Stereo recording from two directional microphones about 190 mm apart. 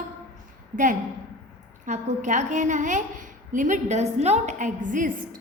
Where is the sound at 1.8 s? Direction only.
40° right (ahead or behind).